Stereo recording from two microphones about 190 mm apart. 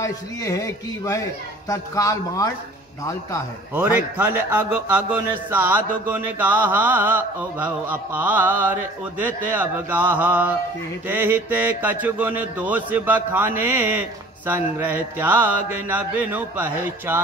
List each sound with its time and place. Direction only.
0.0 s speech: 15° left (ahead or behind)
3.7 s speech: 10° right (ahead or behind)